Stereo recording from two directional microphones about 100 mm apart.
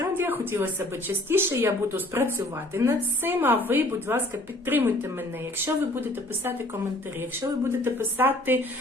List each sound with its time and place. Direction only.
0.0 s speech: 20° right (ahead or behind)
5.6 s speech: 20° right (ahead or behind)
7.6 s speech: 25° right (ahead or behind)